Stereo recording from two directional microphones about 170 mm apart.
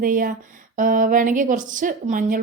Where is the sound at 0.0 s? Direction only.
55° right (ahead or behind).